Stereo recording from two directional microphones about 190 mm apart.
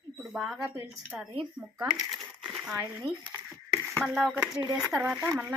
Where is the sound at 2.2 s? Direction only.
10° right (ahead or behind).